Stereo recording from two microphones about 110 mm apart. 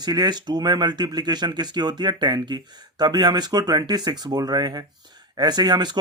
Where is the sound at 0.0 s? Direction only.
40° right (ahead or behind).